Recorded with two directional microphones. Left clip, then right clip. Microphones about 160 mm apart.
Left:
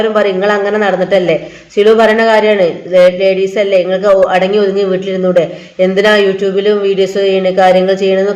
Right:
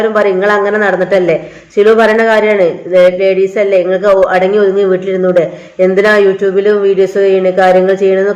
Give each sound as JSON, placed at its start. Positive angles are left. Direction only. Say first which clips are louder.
{"t": 0.0, "sound": "a man's voice", "louder": "right 1 dB", "side_deg": 0}